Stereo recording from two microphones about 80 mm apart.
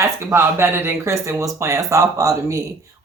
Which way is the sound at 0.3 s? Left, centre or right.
Right.